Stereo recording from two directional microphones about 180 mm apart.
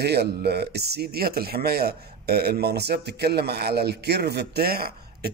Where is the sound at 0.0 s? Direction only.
65° right (ahead or behind).